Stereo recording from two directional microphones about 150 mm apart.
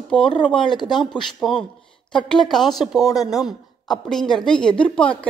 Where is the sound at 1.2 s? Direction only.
5° left (ahead or behind).